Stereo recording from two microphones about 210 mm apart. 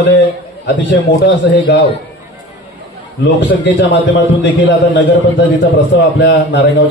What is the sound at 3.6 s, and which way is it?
Speech, 55° left (ahead or behind).